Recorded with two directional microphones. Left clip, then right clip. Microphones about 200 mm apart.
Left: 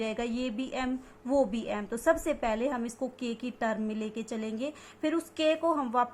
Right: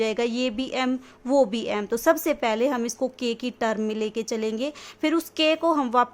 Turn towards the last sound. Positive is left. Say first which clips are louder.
# right 6 dB
turn(degrees=-40)  # may be behind; listen again after turning